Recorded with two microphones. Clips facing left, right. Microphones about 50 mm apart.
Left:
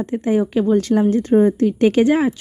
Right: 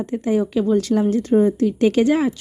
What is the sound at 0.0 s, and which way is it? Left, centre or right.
A woman's voice, left.